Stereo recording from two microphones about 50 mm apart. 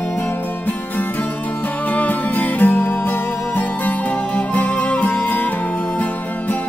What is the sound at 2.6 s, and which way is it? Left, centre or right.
Music, left.